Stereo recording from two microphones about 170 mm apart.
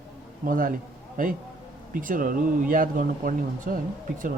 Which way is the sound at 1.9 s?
55° right (ahead or behind).